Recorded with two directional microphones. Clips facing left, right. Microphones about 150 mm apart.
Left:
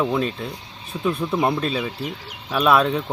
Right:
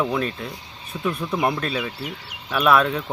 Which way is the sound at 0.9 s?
20° left (ahead or behind).